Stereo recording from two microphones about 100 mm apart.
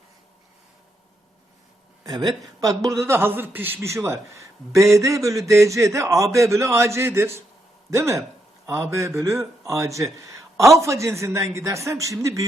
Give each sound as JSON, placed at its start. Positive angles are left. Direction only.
{"t": 2.0, "sound": "a man's voice", "side_deg": -45}